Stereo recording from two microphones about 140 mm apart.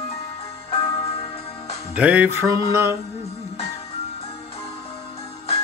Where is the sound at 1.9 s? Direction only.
10° right (ahead or behind).